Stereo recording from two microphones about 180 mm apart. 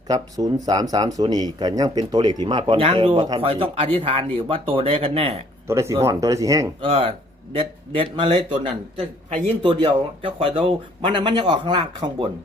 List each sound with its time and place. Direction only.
0.1 s speech: 20° right (ahead or behind)
5.6 s speech: 15° right (ahead or behind)
6.8 s speech: 30° right (ahead or behind)